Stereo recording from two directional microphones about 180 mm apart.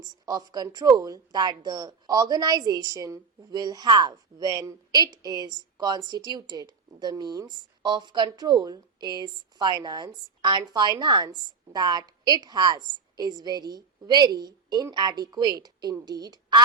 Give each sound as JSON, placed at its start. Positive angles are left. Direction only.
{"t": 0.0, "sound": "speech", "side_deg": -20}